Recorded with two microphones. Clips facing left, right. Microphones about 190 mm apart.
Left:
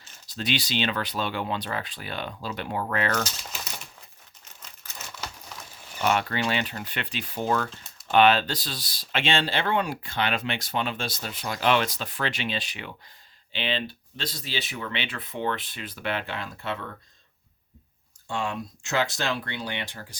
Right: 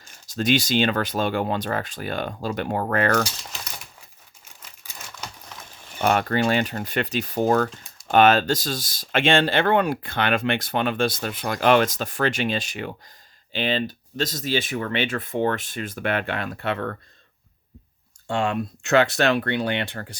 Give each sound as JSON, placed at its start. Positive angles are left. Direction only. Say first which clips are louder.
{"t": 0.3, "sound": "speech", "louder": "right 8 dB", "side_deg": -45}
{"t": 4.4, "sound": "crumpling", "louder": "even", "side_deg": -10}
{"t": 5.1, "sound": "a sound", "louder": "even", "side_deg": 5}
{"t": 6.0, "sound": "speech", "louder": "right 4 dB", "side_deg": -45}
{"t": 18.3, "sound": "speech", "louder": "right 6 dB", "side_deg": -65}